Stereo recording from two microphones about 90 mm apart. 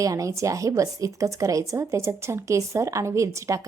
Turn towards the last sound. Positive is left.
turn(degrees=-35)  # may be behind; listen again after turning